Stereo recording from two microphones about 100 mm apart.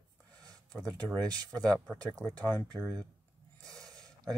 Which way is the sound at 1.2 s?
40° right (ahead or behind).